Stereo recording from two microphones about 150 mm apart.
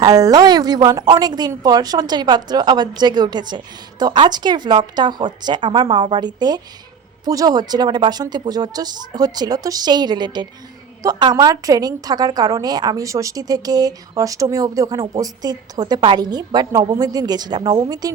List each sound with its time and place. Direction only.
0.0 s a woman's voice: 25° right (ahead or behind)